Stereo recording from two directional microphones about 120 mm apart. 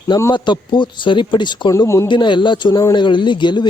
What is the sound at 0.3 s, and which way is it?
Speech, 40° left (ahead or behind).